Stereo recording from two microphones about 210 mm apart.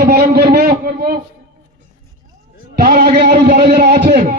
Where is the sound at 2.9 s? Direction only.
50° right (ahead or behind).